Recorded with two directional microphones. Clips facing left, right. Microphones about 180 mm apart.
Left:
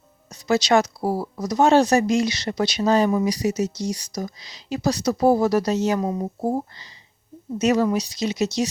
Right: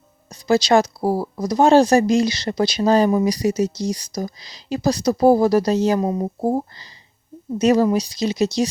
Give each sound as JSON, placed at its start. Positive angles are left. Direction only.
{"t": 0.3, "sound": "speech", "side_deg": -30}